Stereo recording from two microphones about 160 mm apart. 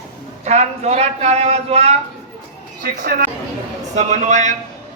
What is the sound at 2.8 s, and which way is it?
A woman's voice, 55° right (ahead or behind).